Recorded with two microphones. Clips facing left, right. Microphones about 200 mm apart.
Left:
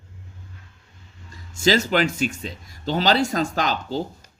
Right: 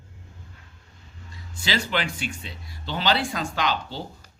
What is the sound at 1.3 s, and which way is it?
A man's voice, 45° left (ahead or behind).